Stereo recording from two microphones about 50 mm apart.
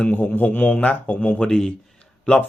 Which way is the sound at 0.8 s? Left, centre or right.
Left.